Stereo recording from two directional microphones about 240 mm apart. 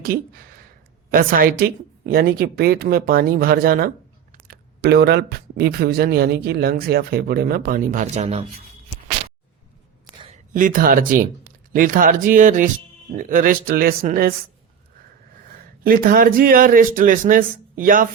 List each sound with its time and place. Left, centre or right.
0.0 s a woman's voice: right
10.5 s a woman's voice: right
15.8 s a woman's voice: right